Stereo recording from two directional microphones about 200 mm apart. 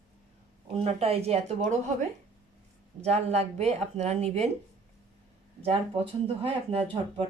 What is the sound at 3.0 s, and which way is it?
Speech, 30° right (ahead or behind).